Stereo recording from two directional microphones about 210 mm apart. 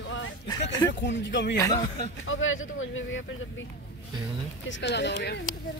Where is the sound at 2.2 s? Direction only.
70° left (ahead or behind).